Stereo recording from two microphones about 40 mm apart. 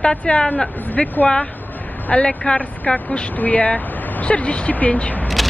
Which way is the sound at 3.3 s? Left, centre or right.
Left.